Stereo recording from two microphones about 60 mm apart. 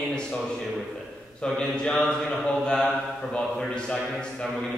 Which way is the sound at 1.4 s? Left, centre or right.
Centre.